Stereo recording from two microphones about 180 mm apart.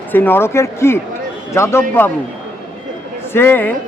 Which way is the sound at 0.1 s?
10° left (ahead or behind).